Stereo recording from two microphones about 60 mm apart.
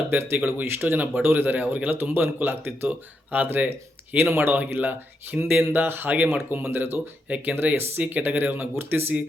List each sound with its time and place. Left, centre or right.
0.1 s speech: right
5.8 s speech: right
7.3 s speech: right